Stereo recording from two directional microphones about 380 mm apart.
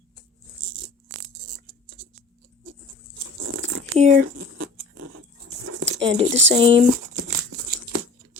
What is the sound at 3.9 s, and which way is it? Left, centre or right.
Speech, centre.